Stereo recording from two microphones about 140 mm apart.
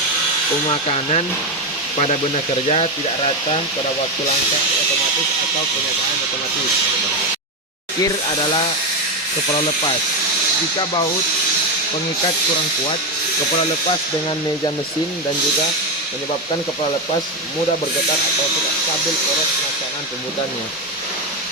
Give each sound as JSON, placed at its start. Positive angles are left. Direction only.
{"t": 0.7, "sound": "speech", "side_deg": 45}
{"t": 2.6, "sound": "speech", "side_deg": 45}
{"t": 8.0, "sound": "speech", "side_deg": 35}